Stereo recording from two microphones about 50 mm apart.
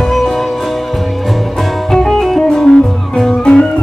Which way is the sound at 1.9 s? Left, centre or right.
Centre.